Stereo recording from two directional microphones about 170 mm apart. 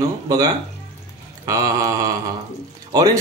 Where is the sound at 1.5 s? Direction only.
20° right (ahead or behind).